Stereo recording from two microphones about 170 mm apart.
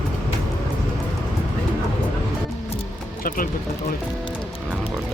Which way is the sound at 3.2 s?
55° left (ahead or behind).